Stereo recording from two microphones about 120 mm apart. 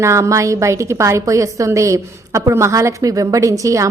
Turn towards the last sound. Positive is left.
turn(degrees=-25)  # may be behind; listen again after turning